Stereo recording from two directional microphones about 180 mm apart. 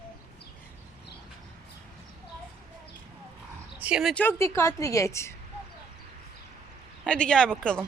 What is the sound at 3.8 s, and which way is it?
Dog, 5° right (ahead or behind).